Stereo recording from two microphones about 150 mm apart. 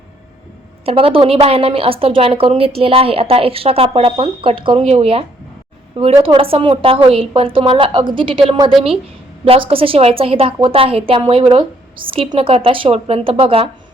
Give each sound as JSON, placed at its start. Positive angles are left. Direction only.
{"t": 0.9, "sound": "a woman's voice", "side_deg": -40}
{"t": 6.2, "sound": "a woman's voice", "side_deg": -40}